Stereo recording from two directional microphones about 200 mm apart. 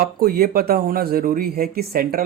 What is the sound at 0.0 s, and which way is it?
Speech, 50° right (ahead or behind).